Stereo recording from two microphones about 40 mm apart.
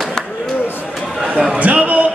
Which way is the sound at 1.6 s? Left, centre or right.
Right.